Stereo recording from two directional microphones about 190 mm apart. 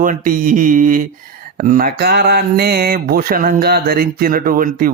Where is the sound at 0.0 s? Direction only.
45° right (ahead or behind).